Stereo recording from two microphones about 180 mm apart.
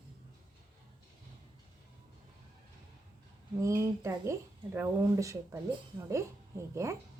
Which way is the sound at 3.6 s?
15° right (ahead or behind).